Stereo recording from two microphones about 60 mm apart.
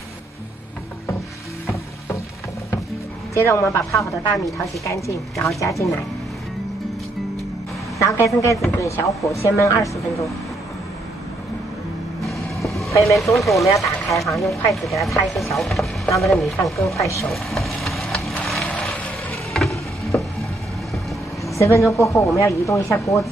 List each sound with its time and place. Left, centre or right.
3.3 s speech: left
8.0 s speech: left
12.5 s vehicle: left
13.0 s speech: centre
13.7 s speech: left
14.0 s speech: centre
16.9 s speech: left
17.3 s vehicle: centre
18.4 s a sound: centre
21.5 s speech: left